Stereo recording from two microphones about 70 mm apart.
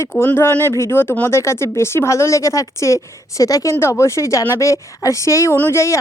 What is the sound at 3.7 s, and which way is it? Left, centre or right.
A woman's voice, left.